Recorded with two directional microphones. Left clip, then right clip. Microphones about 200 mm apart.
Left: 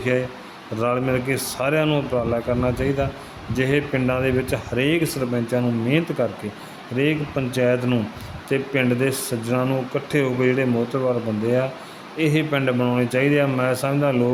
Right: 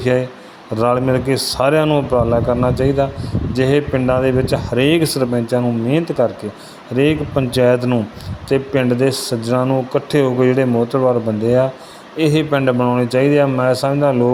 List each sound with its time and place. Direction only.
0.8 s speech: 25° right (ahead or behind)